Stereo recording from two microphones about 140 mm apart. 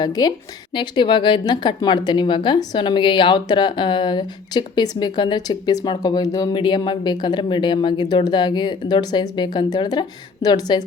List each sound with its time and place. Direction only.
0.0 s a woman's voice: 30° left (ahead or behind)